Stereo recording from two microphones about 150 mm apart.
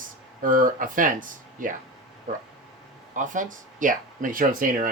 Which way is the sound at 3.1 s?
60° right (ahead or behind).